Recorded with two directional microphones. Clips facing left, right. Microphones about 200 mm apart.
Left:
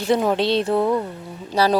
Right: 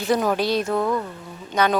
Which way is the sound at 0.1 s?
25° left (ahead or behind).